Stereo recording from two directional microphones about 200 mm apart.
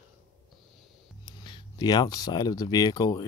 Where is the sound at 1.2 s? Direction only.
20° left (ahead or behind).